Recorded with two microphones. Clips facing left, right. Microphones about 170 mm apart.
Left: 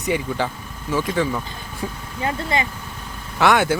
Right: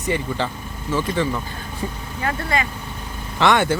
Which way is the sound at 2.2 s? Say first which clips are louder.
Even; 20° left (ahead or behind).